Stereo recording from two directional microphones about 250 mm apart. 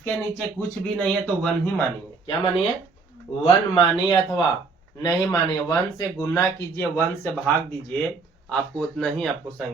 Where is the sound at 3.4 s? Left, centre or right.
Centre.